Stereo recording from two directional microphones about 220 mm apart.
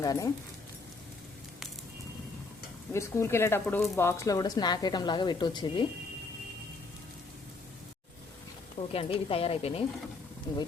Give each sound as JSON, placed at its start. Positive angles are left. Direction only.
{"t": 0.0, "sound": "speech", "side_deg": 15}
{"t": 2.9, "sound": "speech", "side_deg": 10}
{"t": 8.9, "sound": "speech", "side_deg": 25}